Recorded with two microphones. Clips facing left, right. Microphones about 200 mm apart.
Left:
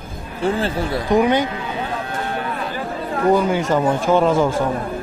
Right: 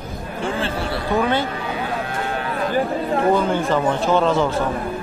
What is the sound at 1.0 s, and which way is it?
Speech, 15° left (ahead or behind).